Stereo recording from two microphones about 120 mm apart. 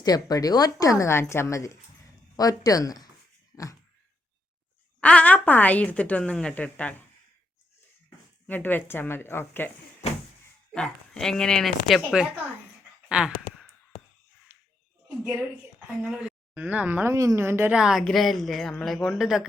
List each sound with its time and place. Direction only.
0.0 s a woman's voice: 30° left (ahead or behind)
3.5 s a sound: 30° left (ahead or behind)
4.9 s a woman's voice: 10° left (ahead or behind)
8.4 s a woman's voice: 15° left (ahead or behind)
10.7 s speech: 5° left (ahead or behind)
13.1 s a sound: 5° right (ahead or behind)
14.5 s a sound: 20° right (ahead or behind)
15.2 s a woman's voice: 10° right (ahead or behind)
17.7 s speech: 5° right (ahead or behind)